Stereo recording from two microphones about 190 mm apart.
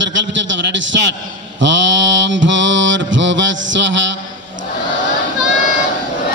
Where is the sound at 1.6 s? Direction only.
75° right (ahead or behind).